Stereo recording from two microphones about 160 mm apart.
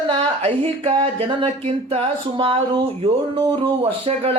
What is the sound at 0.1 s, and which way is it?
A woman's voice, 35° right (ahead or behind).